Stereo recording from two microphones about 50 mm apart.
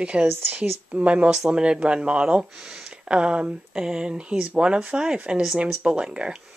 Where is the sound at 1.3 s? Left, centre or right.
Centre.